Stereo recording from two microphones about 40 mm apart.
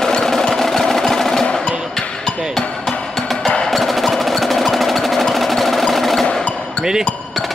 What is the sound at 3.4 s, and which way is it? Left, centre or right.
Wood block, left.